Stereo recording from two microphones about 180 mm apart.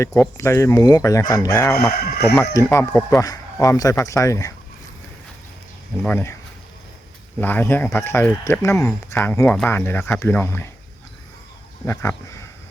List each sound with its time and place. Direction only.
0.1 s speech: 10° left (ahead or behind)
1.9 s speech: 60° left (ahead or behind)
2.6 s speech: 15° left (ahead or behind)
6.0 s speech: 10° left (ahead or behind)
7.3 s speech: 10° left (ahead or behind)
11.9 s speech: 15° left (ahead or behind)